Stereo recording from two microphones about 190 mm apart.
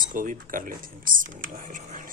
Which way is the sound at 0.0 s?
45° right (ahead or behind).